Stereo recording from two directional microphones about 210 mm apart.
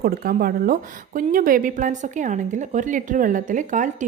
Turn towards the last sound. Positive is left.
turn(degrees=-35)  # may be behind; listen again after turning